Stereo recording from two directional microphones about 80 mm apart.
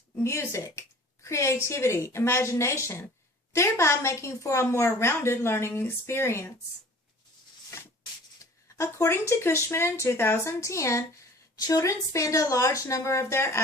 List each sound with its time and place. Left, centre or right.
0.2 s speech: left
8.4 s speech: left